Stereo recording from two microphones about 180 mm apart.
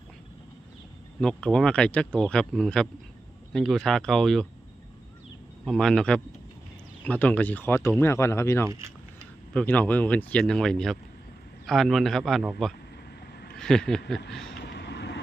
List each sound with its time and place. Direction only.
1.2 s speech: 5° left (ahead or behind)
5.6 s speech: centre (ahead or behind)
8.7 s keys jangling: 15° right (ahead or behind)
9.5 s speech: 10° left (ahead or behind)
14.6 s vehicle: 70° left (ahead or behind)